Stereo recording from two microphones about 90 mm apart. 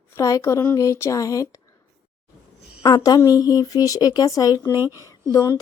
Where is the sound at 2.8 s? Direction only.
40° left (ahead or behind).